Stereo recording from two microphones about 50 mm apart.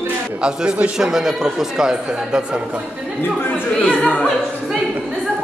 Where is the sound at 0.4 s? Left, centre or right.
Right.